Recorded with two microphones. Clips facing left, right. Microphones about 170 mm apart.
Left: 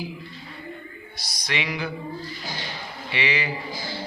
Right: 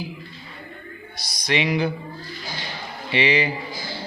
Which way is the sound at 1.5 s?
25° right (ahead or behind).